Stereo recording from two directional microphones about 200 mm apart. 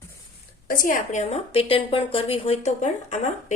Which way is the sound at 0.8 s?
40° left (ahead or behind).